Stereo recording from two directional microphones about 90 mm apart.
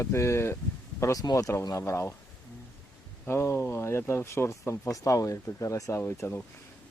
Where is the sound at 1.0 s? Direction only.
40° left (ahead or behind).